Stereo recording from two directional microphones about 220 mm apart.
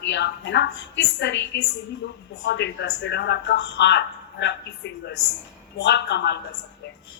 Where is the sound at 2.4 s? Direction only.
50° left (ahead or behind).